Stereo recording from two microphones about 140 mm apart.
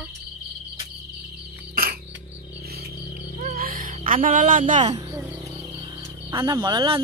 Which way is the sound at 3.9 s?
75° right (ahead or behind).